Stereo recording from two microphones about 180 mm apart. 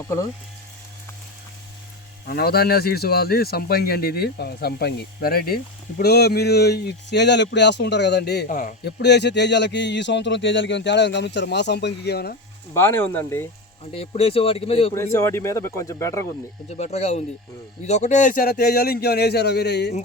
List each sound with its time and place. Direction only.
2.2 s speech: 60° left (ahead or behind)
12.7 s speech: 15° left (ahead or behind)
13.9 s speech: 35° left (ahead or behind)
14.9 s speech: 15° left (ahead or behind)
16.6 s speech: 40° left (ahead or behind); by 19.9 s 65° left (ahead or behind)